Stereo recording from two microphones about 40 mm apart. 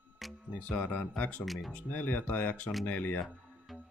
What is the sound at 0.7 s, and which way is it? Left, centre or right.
Speech, left.